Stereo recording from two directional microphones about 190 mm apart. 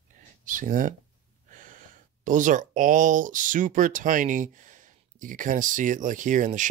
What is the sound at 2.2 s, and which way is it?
Speech, 45° right (ahead or behind).